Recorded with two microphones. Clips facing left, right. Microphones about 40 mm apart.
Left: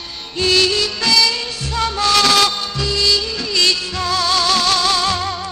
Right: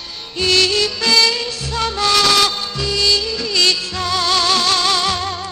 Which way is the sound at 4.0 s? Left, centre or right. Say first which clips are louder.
Left 2 dB; right.